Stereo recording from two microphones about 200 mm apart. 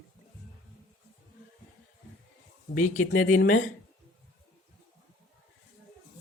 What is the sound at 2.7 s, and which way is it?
Speech, 40° left (ahead or behind).